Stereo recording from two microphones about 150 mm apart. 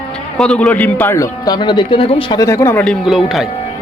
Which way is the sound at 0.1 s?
5° left (ahead or behind).